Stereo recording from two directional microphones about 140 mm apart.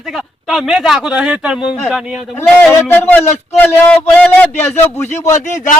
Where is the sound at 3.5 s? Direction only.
10° left (ahead or behind).